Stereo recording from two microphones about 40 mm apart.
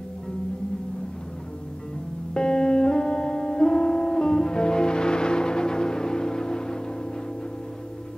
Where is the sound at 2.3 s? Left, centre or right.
Centre.